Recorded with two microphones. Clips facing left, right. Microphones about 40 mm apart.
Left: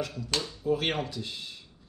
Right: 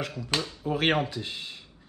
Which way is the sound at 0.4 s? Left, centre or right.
Right.